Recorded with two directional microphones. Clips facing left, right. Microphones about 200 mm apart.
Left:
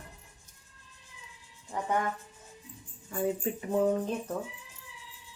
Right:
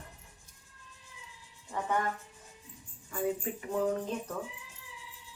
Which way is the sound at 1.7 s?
15° left (ahead or behind).